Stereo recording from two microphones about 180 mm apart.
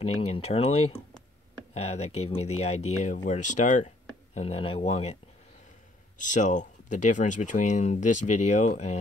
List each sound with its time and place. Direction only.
0.0 s speech: 35° left (ahead or behind)
6.1 s speech: 45° left (ahead or behind)